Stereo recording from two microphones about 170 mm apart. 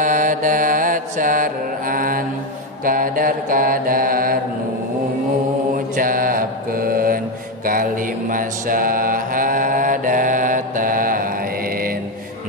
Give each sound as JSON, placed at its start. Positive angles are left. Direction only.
{"t": 0.0, "sound": "mantra", "side_deg": -50}
{"t": 5.9, "sound": "mantra", "side_deg": -55}